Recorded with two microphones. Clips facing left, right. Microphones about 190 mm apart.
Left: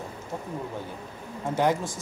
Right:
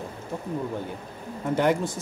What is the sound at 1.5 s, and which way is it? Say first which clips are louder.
Speech: right 2 dB; 60° right (ahead or behind).